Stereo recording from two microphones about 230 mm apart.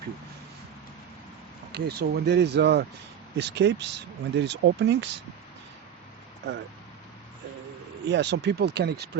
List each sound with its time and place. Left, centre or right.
1.7 s speech: right
8.1 s speech: right